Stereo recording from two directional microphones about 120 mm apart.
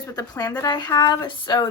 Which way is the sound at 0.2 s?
35° left (ahead or behind).